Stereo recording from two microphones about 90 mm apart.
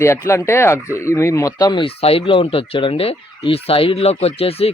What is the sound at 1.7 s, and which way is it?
Speech, 80° left.